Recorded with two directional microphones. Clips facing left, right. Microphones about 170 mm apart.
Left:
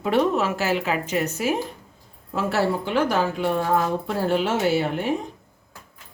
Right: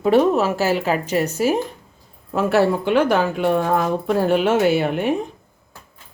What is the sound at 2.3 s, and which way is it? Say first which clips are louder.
A woman's voice: right 6 dB; 60° right (ahead or behind).